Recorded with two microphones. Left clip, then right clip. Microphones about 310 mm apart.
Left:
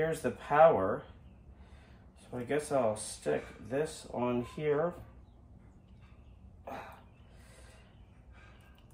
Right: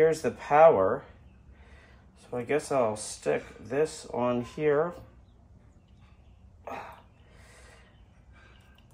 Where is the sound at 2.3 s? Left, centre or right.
Centre.